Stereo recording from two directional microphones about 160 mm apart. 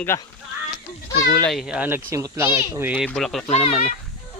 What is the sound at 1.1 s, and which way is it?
Speech, 90° left.